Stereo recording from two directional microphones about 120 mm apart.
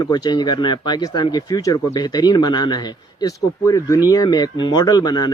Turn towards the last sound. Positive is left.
turn(degrees=35)  # may be behind; listen again after turning